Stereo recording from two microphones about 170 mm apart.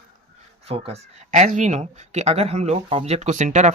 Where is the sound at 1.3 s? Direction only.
50° right (ahead or behind).